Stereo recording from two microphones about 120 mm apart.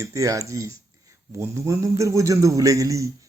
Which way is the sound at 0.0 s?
25° right (ahead or behind).